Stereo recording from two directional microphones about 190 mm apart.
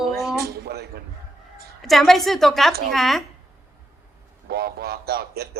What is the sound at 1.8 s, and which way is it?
A woman's voice, centre (ahead or behind).